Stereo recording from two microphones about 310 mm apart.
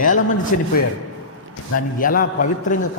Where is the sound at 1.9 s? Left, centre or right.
Left.